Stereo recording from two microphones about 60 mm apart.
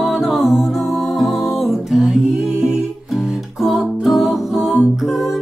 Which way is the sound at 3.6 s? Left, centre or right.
Centre.